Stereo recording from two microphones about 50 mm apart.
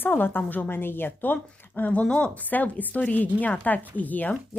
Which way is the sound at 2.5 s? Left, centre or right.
Left.